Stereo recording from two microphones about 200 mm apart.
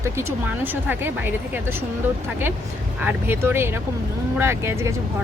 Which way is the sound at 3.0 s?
10° right (ahead or behind).